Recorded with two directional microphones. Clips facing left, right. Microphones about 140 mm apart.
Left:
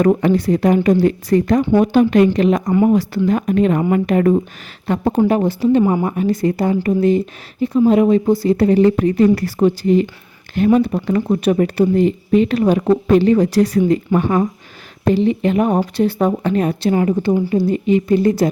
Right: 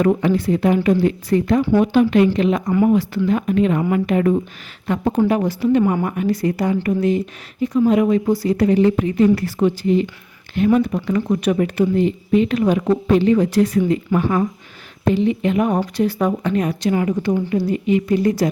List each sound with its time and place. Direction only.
0.0 s speech: 45° left (ahead or behind)
10.8 s speech: 35° left (ahead or behind)